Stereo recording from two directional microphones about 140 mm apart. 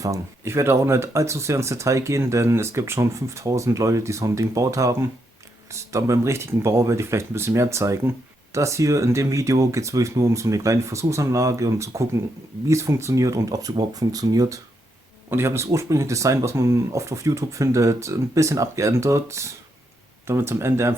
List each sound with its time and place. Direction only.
0.0 s speech: 20° right (ahead or behind)